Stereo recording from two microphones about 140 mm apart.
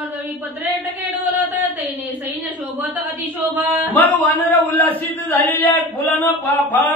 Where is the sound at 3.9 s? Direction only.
10° left (ahead or behind).